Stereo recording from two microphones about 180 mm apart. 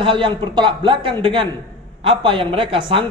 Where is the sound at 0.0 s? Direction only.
30° right (ahead or behind).